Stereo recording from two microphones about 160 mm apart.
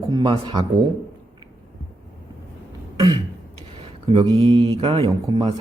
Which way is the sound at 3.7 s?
35° right (ahead or behind).